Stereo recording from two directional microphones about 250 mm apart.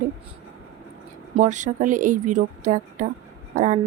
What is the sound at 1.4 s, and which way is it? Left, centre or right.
Speech, right.